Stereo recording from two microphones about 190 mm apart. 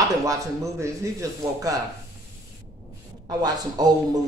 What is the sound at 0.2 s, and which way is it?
Speech, 20° right (ahead or behind).